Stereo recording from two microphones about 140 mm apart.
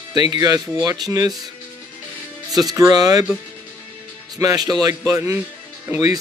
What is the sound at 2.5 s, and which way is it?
Speech, 25° right (ahead or behind).